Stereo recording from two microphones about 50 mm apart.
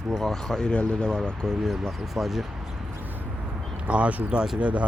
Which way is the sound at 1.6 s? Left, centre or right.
Centre.